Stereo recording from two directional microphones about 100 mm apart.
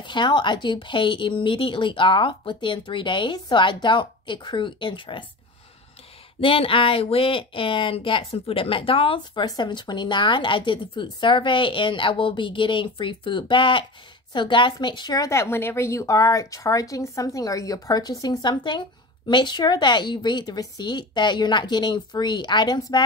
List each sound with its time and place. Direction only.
0.0 s speech: 50° left (ahead or behind)
6.4 s speech: 65° left (ahead or behind); by 15.2 s 45° left (ahead or behind)
15.2 s speech: 25° left (ahead or behind); by 23.0 s 50° left (ahead or behind)